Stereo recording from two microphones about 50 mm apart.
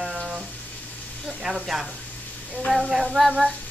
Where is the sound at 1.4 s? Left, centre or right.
Centre.